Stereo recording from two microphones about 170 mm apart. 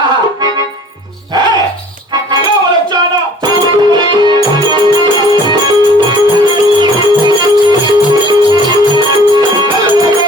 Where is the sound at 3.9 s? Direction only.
25° right (ahead or behind).